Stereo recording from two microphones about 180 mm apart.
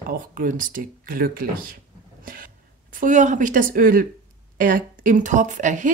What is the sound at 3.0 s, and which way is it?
A woman's voice, 45° right (ahead or behind).